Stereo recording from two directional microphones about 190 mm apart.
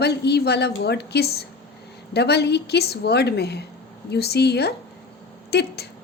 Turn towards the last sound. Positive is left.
turn(degrees=60)  # may be behind; listen again after turning